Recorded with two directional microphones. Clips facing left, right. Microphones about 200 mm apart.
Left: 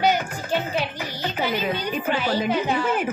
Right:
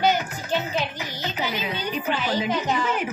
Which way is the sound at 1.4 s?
50° left (ahead or behind).